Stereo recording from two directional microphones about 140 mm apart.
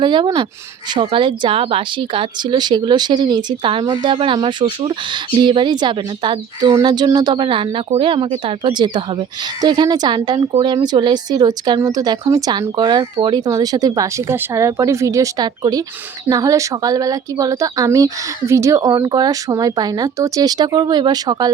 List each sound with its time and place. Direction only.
0.0 s speech: 35° right (ahead or behind)